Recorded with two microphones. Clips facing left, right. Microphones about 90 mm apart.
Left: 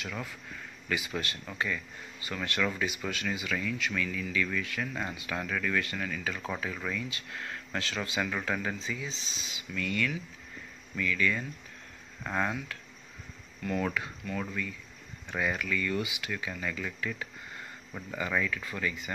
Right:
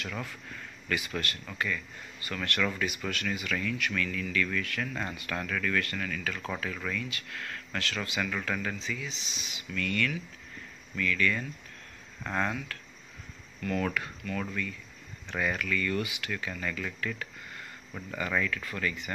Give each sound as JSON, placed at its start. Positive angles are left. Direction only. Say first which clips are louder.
{"t": 0.1, "sound": "speech", "louder": "right 1 dB", "side_deg": 10}